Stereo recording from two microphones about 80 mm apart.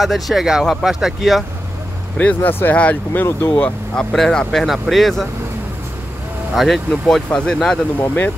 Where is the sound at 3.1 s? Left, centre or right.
Left.